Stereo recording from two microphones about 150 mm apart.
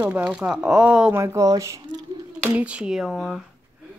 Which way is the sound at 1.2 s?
20° right (ahead or behind).